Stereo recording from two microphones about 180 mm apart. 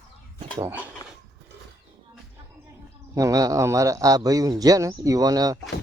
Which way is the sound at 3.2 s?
20° right (ahead or behind).